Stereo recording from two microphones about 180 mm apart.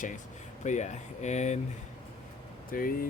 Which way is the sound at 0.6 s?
40° left (ahead or behind).